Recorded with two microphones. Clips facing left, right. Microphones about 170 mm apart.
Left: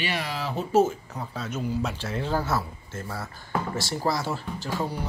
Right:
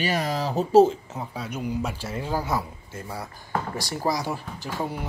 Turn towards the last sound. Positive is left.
turn(degrees=-15)  # may be behind; listen again after turning